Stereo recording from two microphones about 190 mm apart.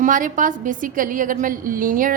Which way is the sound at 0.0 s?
45° right (ahead or behind).